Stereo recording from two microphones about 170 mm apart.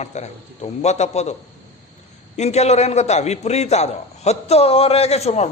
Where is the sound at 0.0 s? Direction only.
40° left (ahead or behind).